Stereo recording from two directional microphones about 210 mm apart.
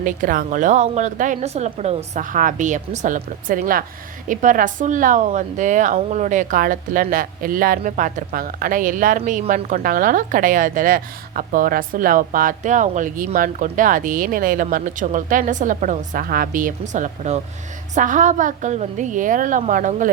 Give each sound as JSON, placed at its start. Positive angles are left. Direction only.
{"t": 0.0, "sound": "speech", "side_deg": -40}